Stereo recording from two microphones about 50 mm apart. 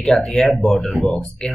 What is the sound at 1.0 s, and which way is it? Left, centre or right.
Speech, centre.